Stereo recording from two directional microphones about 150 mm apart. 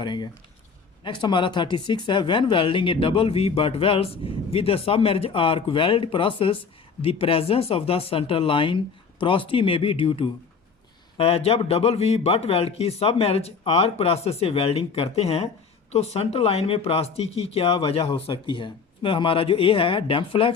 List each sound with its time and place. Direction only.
0.0 s speech: 30° left (ahead or behind)